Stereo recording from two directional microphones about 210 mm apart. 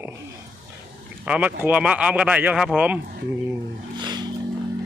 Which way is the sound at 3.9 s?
20° right (ahead or behind).